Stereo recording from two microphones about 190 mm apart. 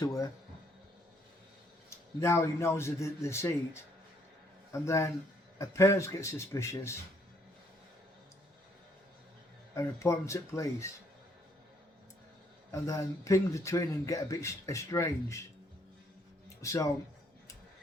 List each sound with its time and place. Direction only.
0.0 s speech: 20° left (ahead or behind)
2.2 s speech: 15° left (ahead or behind)
4.7 s speech: 15° left (ahead or behind)
9.7 s speech: 15° left (ahead or behind)
12.7 s speech: 15° left (ahead or behind)
16.6 s speech: 15° left (ahead or behind)